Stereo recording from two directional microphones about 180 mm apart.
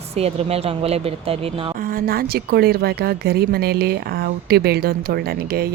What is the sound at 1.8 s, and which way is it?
A woman's voice, 55° right (ahead or behind).